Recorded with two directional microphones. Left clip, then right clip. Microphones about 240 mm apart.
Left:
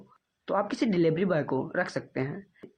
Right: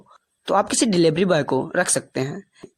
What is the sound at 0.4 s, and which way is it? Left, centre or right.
Speech, right.